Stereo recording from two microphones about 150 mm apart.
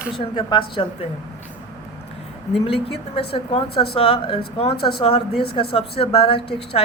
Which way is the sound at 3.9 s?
40° left (ahead or behind).